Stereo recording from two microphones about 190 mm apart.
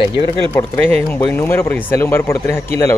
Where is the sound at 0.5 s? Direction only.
10° left (ahead or behind).